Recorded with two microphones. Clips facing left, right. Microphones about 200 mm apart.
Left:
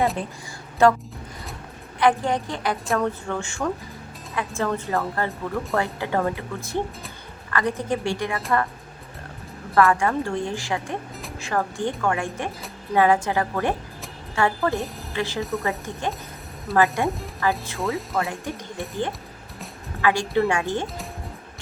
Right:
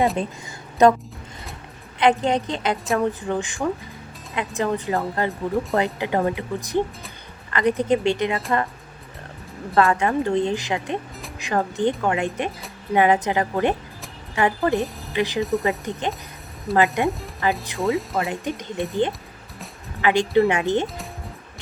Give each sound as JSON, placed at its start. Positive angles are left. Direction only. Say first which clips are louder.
{"t": 0.8, "sound": "a woman's voice", "louder": "right 2 dB", "side_deg": -20}
{"t": 2.0, "sound": "a woman's voice", "louder": "right 2 dB", "side_deg": -20}
{"t": 9.7, "sound": "a woman's voice", "louder": "even", "side_deg": -20}
{"t": 15.4, "sound": "speech", "louder": "right 6 dB", "side_deg": 0}
{"t": 15.8, "sound": "a woman's voice", "louder": "right 2 dB", "side_deg": -20}
{"t": 17.7, "sound": "speech", "louder": "right 3 dB", "side_deg": 0}
{"t": 18.3, "sound": "a woman's voice", "louder": "right 4 dB", "side_deg": -20}